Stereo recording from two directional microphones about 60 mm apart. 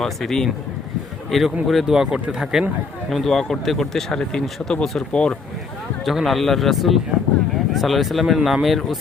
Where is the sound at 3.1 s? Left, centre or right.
Centre.